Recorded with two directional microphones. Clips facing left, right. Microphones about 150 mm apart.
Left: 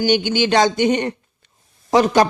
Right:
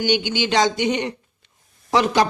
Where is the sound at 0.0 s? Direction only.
45° left (ahead or behind).